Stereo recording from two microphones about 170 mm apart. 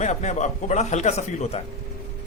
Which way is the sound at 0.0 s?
45° left (ahead or behind).